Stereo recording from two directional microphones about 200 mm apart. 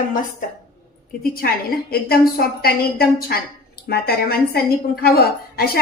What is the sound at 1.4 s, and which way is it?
A woman's voice, 50° left (ahead or behind).